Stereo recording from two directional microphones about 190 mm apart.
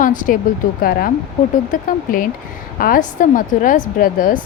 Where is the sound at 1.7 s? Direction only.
45° left (ahead or behind).